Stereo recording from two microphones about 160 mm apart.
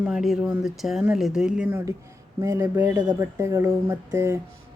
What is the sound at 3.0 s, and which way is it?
Speech, 20° right (ahead or behind).